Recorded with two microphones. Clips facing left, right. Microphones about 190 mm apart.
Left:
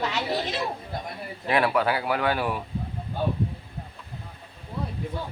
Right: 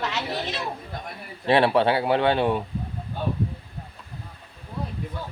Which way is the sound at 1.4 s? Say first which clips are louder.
Right 4 dB; 30° right (ahead or behind).